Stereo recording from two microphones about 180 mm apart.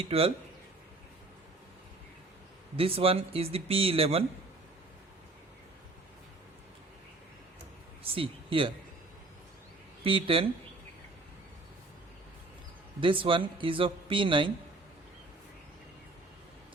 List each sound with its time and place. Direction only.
0.1 s speech: 30° right (ahead or behind)
2.7 s speech: 30° right (ahead or behind)
8.0 s speech: 30° right (ahead or behind)
10.0 s speech: 30° right (ahead or behind)
13.0 s speech: 30° right (ahead or behind)